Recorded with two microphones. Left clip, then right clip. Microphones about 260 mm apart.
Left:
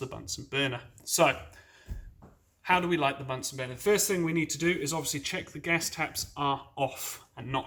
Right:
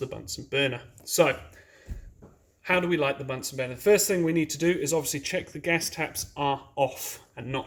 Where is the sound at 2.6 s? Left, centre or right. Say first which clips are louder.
Right 1 dB; centre.